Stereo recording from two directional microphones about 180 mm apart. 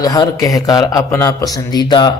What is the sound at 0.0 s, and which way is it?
A man's voice, 20° left (ahead or behind).